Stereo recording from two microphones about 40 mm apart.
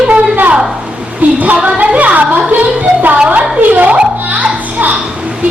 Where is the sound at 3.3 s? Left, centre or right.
Right.